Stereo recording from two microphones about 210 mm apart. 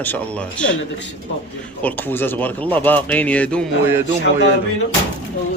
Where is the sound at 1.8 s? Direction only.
10° left (ahead or behind).